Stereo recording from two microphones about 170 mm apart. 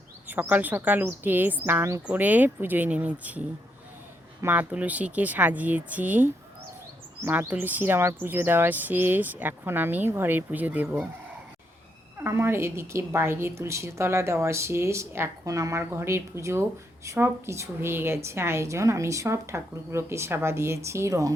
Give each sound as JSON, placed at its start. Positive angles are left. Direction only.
{"t": 0.3, "sound": "a woman's voice", "side_deg": -10}
{"t": 12.2, "sound": "a woman's voice", "side_deg": -15}